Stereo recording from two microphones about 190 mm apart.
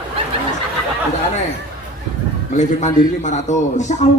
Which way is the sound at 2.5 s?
40° left (ahead or behind).